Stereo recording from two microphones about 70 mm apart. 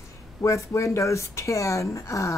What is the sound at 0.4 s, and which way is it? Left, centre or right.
Speech, left.